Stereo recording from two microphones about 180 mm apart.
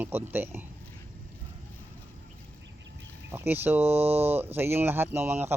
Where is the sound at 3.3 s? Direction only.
10° right (ahead or behind).